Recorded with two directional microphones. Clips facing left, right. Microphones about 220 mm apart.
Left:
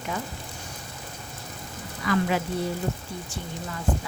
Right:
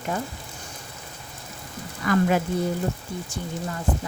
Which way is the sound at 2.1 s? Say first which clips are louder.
Right 2 dB; 50° right (ahead or behind).